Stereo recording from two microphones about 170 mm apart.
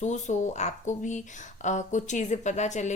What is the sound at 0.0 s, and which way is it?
Speech, 45° left (ahead or behind).